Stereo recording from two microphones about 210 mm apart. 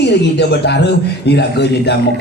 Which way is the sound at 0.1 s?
55° left (ahead or behind).